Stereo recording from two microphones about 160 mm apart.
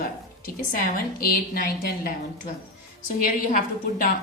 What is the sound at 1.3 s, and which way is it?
A woman's voice, 65° left (ahead or behind).